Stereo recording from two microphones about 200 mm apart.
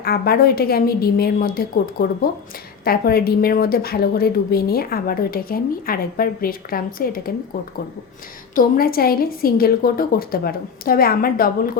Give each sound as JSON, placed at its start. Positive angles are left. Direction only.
{"t": 0.0, "sound": "a woman's voice", "side_deg": 50}
{"t": 8.5, "sound": "a woman's voice", "side_deg": 45}